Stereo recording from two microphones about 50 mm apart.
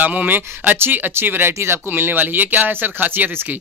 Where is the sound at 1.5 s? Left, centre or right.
Right.